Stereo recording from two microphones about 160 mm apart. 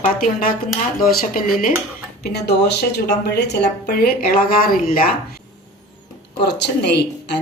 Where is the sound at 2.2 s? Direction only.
85° left.